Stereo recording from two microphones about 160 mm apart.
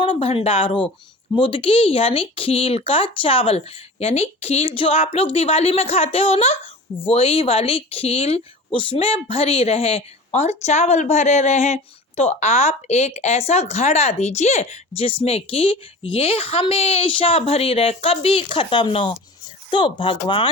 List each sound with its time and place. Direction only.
0.0 s a woman's voice: 35° left (ahead or behind)